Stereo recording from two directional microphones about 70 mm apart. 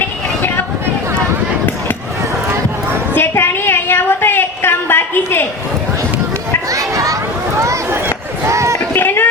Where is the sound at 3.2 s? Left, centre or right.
Left.